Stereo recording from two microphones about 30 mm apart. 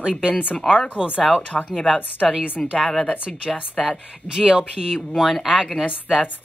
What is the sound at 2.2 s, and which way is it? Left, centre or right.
Speech, right.